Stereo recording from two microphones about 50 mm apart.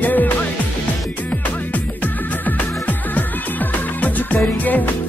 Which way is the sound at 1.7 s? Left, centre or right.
Left.